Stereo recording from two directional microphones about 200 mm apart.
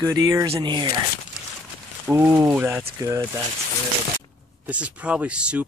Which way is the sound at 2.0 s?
10° right (ahead or behind).